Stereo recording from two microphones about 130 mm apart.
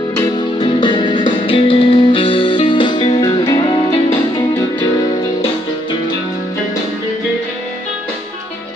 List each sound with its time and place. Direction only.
0.6 s music: 40° left (ahead or behind)